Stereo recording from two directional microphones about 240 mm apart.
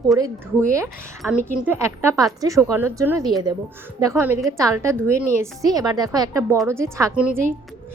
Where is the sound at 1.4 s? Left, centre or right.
Centre.